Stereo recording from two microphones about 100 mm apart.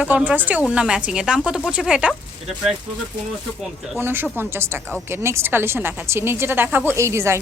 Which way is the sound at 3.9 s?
20° right (ahead or behind).